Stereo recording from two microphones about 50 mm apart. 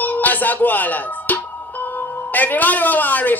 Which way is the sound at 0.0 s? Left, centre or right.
Left.